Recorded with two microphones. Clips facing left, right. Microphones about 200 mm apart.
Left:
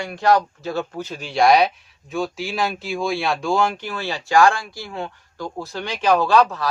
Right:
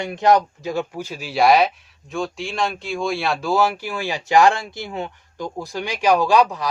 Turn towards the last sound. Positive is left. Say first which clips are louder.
# even
turn(degrees=-15)  # may be behind; listen again after turning